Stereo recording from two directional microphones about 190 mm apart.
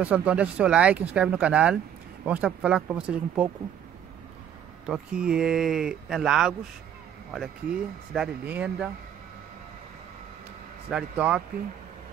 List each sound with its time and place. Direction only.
0.0 s speech: 5° right (ahead or behind)
4.8 s speech: 5° right (ahead or behind)
10.9 s speech: 5° right (ahead or behind)